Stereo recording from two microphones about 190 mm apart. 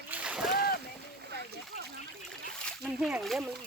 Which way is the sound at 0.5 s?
55° left (ahead or behind).